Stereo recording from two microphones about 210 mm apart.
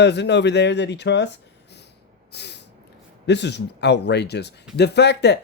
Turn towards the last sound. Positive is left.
turn(degrees=50)  # may be behind; listen again after turning